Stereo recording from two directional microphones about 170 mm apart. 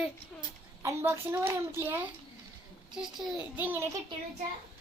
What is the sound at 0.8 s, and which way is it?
A child's voice, 15° right (ahead or behind).